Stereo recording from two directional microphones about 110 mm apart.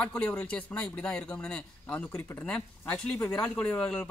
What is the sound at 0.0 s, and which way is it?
Speech, 10° left (ahead or behind).